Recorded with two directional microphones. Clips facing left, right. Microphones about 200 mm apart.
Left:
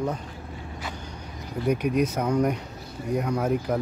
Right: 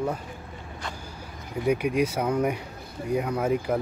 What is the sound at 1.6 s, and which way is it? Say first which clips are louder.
Speech: even; 10° right (ahead or behind).